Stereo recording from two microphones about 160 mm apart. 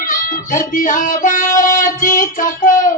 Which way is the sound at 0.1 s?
55° left (ahead or behind).